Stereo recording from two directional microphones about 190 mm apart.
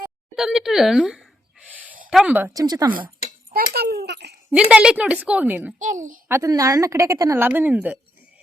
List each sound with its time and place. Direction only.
0.3 s a sound: centre (ahead or behind)
2.0 s a woman's voice: 5° right (ahead or behind)
3.5 s a child's voice: 55° right (ahead or behind)
4.7 s a woman's voice: 5° right (ahead or behind)
5.8 s a child's voice: 40° right (ahead or behind)
6.2 s a woman's voice: 15° right (ahead or behind)